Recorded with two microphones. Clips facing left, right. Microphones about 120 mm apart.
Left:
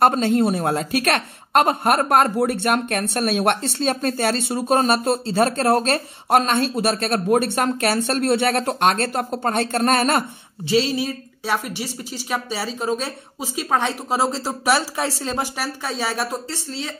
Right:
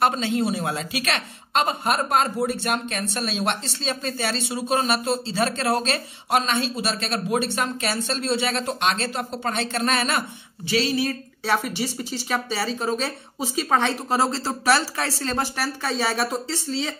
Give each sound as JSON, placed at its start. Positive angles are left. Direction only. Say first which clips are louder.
{"t": 0.0, "sound": "a woman's voice", "louder": "left 5 dB", "side_deg": 45}
{"t": 10.7, "sound": "speech", "louder": "left 3 dB", "side_deg": 25}
{"t": 11.1, "sound": "a woman's voice", "louder": "even", "side_deg": 5}